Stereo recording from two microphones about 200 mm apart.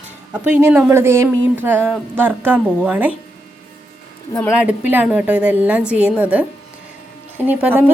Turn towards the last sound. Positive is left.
turn(degrees=-10)  # may be behind; listen again after turning